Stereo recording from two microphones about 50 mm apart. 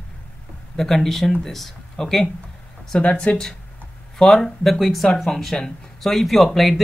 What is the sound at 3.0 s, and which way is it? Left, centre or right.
Speech, left.